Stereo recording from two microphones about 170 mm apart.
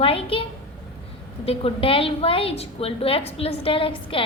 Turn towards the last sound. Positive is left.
turn(degrees=30)  # may be behind; listen again after turning